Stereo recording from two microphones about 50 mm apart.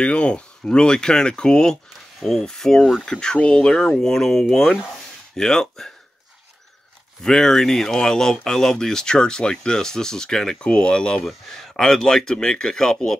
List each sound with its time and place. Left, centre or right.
0.0 s speech: left
2.1 s speech: centre
7.2 s speech: centre
11.1 s speech: centre